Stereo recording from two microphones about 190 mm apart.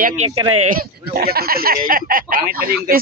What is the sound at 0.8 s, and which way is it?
Speech, 55° right (ahead or behind).